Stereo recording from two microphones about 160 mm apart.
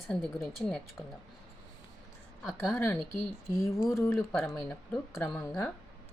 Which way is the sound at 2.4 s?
Centre (ahead or behind).